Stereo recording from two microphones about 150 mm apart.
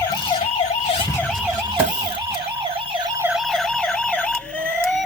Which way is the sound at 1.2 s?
5° left (ahead or behind).